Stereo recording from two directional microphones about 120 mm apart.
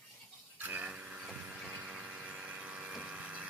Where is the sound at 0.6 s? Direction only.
15° right (ahead or behind).